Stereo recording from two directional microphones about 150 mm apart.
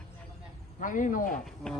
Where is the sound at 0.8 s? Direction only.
60° left (ahead or behind).